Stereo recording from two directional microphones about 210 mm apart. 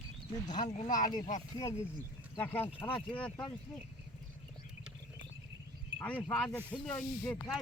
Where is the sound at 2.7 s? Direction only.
25° left (ahead or behind).